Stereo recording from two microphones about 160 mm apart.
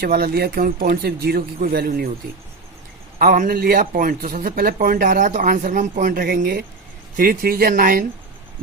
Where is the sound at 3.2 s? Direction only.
55° right (ahead or behind).